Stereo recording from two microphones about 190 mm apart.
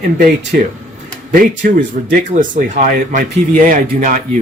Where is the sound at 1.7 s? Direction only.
45° right (ahead or behind).